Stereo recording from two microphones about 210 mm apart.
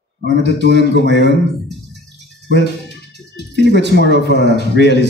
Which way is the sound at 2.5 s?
55° right (ahead or behind).